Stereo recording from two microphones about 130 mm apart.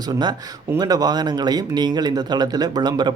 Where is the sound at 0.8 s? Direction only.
30° right (ahead or behind).